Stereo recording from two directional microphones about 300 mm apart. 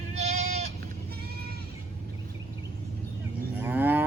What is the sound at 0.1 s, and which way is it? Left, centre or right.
Goat, right.